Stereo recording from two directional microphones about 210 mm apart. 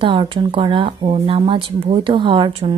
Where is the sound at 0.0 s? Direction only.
25° right (ahead or behind).